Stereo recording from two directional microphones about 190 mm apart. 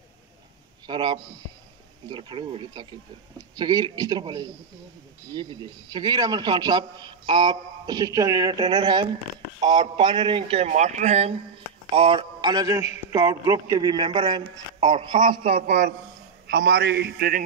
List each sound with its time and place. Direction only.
0.8 s a man's voice: 25° right (ahead or behind)
16.4 s a man's voice: 55° right (ahead or behind)